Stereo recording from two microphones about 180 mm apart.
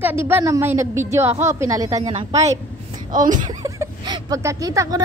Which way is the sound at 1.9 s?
35° right (ahead or behind).